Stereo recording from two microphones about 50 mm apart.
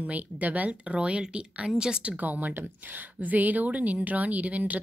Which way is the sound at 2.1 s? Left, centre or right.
Right.